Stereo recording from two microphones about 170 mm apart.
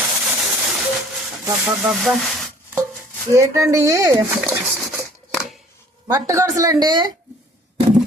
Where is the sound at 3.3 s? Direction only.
20° right (ahead or behind).